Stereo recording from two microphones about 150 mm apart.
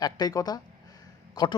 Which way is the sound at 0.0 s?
25° left (ahead or behind).